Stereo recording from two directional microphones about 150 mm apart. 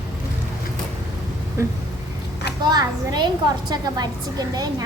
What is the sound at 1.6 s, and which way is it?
A woman's voice, 20° right (ahead or behind).